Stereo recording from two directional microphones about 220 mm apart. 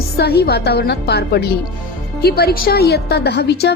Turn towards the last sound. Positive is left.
turn(degrees=50)  # may be behind; listen again after turning